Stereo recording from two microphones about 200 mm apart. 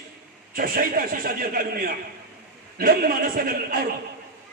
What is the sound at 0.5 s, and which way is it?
Speech, 45° right (ahead or behind).